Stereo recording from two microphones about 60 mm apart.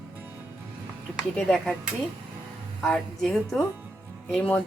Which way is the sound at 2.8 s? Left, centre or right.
Centre.